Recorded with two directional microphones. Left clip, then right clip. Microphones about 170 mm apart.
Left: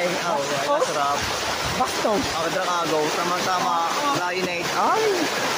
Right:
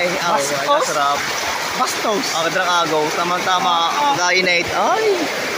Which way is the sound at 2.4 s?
30° right (ahead or behind).